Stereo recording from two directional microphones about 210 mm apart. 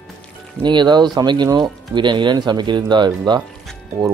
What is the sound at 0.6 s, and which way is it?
Speech, 20° right (ahead or behind).